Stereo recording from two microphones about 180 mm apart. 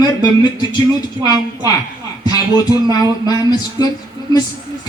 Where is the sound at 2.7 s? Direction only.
20° left (ahead or behind).